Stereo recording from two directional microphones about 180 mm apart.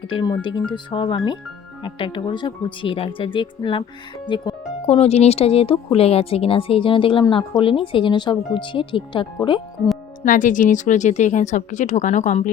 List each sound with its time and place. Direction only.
0.1 s speech: 25° left (ahead or behind)
10.2 s speech: 45° left (ahead or behind)